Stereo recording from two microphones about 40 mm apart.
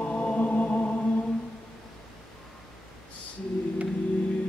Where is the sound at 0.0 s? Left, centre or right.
Left.